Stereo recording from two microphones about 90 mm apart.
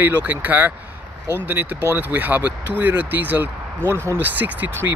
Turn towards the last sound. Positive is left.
turn(degrees=-20)  # may be behind; listen again after turning